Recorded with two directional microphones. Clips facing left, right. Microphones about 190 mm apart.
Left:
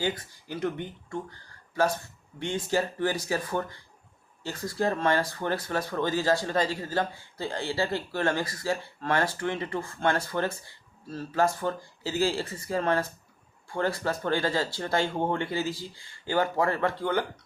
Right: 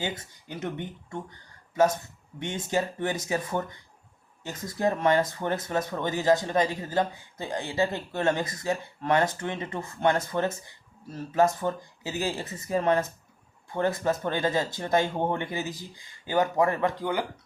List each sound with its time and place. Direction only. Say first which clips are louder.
0.0 s speech: left 3 dB; 25° right (ahead or behind)